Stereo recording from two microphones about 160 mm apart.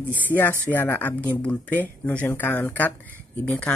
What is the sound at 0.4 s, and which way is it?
Speech, 10° left (ahead or behind).